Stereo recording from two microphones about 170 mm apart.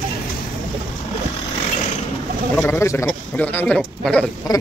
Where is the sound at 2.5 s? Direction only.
15° left (ahead or behind).